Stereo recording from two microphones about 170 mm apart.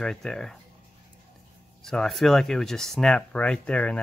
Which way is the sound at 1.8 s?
5° left (ahead or behind).